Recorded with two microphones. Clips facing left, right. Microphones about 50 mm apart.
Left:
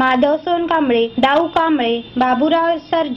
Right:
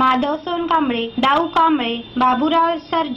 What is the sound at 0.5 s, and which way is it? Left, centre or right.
A woman's voice, centre.